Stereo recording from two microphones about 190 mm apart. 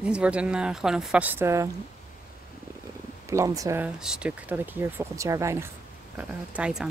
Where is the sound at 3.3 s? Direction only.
15° right (ahead or behind).